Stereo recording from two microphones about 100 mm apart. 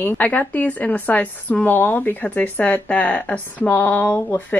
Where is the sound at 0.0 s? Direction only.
15° left (ahead or behind).